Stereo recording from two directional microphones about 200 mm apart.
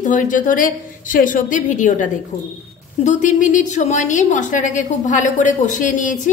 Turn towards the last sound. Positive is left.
turn(degrees=40)  # may be behind; listen again after turning